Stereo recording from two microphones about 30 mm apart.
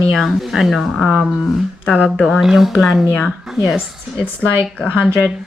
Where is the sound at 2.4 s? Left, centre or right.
Centre.